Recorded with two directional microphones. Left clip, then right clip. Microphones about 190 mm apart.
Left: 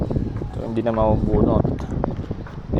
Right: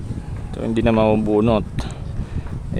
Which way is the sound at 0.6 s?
25° right (ahead or behind).